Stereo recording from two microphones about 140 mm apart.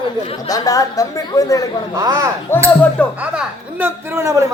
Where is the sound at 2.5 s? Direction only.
15° left (ahead or behind).